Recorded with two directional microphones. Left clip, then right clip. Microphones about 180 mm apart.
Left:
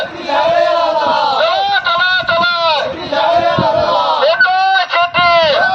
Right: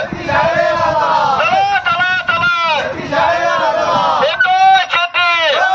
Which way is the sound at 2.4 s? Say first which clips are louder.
Left 1 dB; 5° left (ahead or behind).